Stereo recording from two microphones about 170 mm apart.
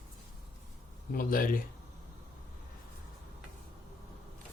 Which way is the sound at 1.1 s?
55° left (ahead or behind).